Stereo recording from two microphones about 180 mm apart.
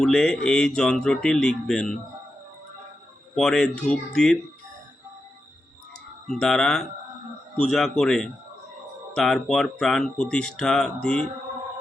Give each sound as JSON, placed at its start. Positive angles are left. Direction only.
{"t": 0.0, "sound": "speech", "side_deg": 5}
{"t": 3.3, "sound": "speech", "side_deg": 5}
{"t": 6.2, "sound": "speech", "side_deg": 5}